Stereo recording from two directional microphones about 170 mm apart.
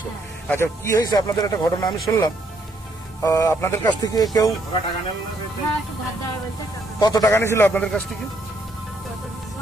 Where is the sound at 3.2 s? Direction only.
20° left (ahead or behind).